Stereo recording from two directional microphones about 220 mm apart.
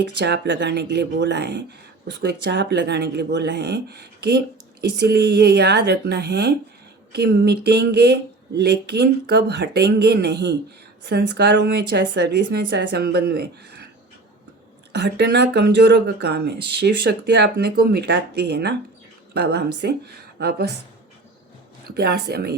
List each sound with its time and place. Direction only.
0.2 s speech: 55° right (ahead or behind)
14.9 s speech: 50° right (ahead or behind)
21.8 s speech: 45° right (ahead or behind)